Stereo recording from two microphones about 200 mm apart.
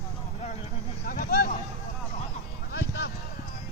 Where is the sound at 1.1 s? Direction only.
50° left (ahead or behind).